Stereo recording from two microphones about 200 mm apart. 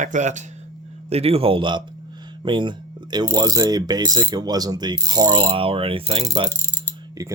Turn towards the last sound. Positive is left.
turn(degrees=-20)  # may be behind; listen again after turning